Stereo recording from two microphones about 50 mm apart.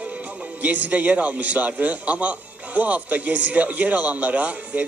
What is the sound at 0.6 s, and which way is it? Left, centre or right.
A man's voice, right.